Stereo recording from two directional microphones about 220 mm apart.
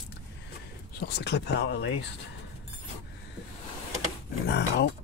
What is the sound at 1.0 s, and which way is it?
Speech, 50° left (ahead or behind).